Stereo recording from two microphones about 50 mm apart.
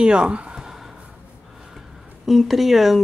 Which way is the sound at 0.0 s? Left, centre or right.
Centre.